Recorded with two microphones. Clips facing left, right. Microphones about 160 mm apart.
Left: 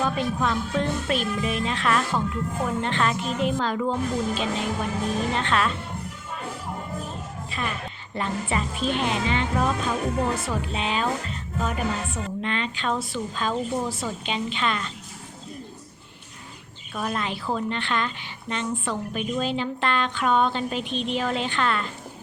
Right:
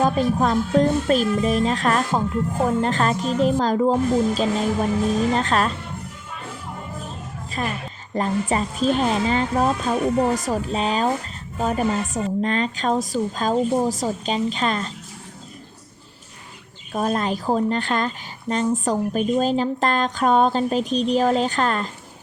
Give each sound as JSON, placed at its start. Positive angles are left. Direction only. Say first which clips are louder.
{"t": 0.0, "sound": "a woman's voice", "louder": "right 6 dB", "side_deg": -40}
{"t": 7.6, "sound": "a woman's voice", "louder": "right 4 dB", "side_deg": -40}
{"t": 16.9, "sound": "a woman's voice", "louder": "right 6 dB", "side_deg": -40}